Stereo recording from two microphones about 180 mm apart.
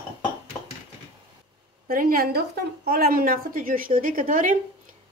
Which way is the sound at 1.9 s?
50° right (ahead or behind).